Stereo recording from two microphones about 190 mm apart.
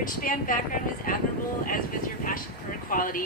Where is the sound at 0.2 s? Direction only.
45° left (ahead or behind).